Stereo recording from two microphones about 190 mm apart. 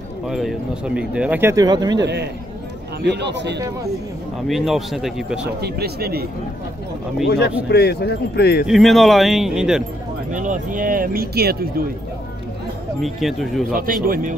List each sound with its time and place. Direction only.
0.3 s speech: centre (ahead or behind); by 2.0 s 20° right (ahead or behind)
3.0 s speech: 65° right (ahead or behind)
4.5 s speech: centre (ahead or behind)
5.6 s speech: 55° right (ahead or behind)
7.2 s speech: 60° left (ahead or behind)
8.6 s speech: centre (ahead or behind)
10.3 s speech: 40° right (ahead or behind)
13.0 s speech: centre (ahead or behind)
14.0 s speech: 45° right (ahead or behind)